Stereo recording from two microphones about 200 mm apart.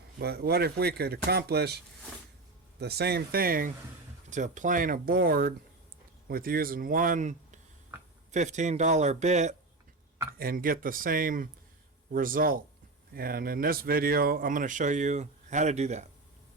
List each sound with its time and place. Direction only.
0.2 s speech: 55° right (ahead or behind); by 9.6 s 35° right (ahead or behind)
10.3 s speech: 45° right (ahead or behind)